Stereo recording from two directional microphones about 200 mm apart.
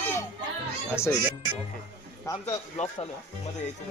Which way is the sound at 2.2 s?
20° left (ahead or behind).